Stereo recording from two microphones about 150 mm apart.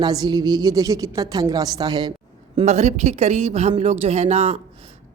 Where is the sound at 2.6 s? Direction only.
50° right (ahead or behind).